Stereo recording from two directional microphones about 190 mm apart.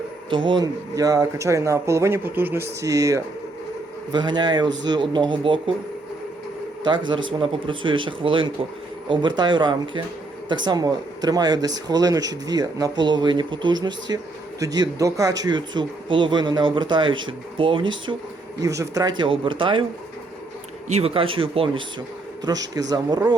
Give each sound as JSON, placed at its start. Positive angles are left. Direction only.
{"t": 0.3, "sound": "speech", "side_deg": -25}
{"t": 6.8, "sound": "speech", "side_deg": -25}
{"t": 20.8, "sound": "speech", "side_deg": -35}